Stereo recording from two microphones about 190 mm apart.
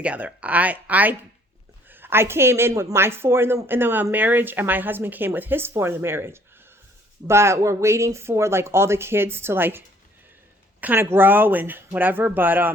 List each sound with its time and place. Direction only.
0.0 s a woman's voice: 5° right (ahead or behind)